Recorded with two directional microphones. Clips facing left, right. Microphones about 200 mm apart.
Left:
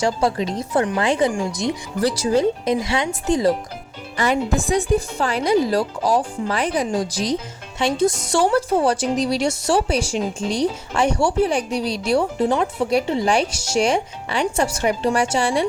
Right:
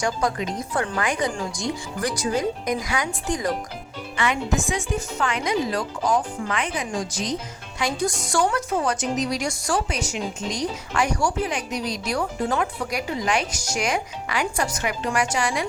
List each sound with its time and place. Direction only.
0.0 s a woman's voice: 30° left (ahead or behind)
4.2 s a woman's voice: 35° left (ahead or behind)